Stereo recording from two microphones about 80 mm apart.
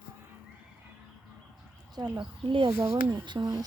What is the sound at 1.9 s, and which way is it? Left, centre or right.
Speech, right.